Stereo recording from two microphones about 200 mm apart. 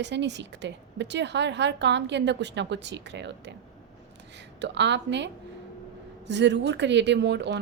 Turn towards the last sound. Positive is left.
turn(degrees=-60)  # may be behind; listen again after turning